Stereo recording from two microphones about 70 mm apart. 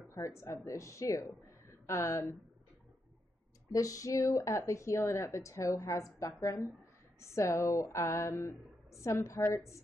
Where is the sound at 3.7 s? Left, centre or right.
Left.